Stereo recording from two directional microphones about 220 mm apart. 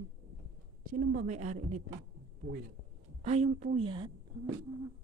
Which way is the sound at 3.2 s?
30° right (ahead or behind).